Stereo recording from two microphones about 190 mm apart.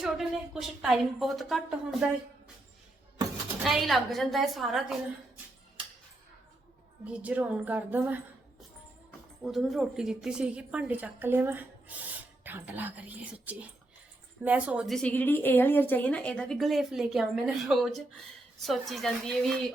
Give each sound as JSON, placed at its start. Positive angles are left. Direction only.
{"t": 0.0, "sound": "a woman's voice", "side_deg": 0}
{"t": 3.6, "sound": "a woman's voice", "side_deg": 0}
{"t": 7.0, "sound": "a woman's voice", "side_deg": -5}
{"t": 9.4, "sound": "a woman's voice", "side_deg": 0}